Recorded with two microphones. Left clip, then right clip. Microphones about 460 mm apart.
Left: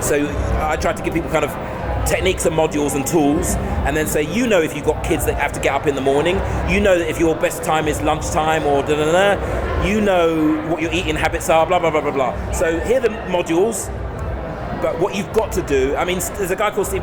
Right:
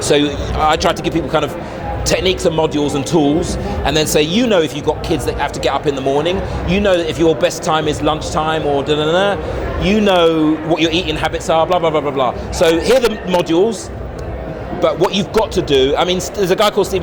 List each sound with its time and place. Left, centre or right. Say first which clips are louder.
0.1 s speech: right 6 dB; right
14.8 s speech: right 6 dB; right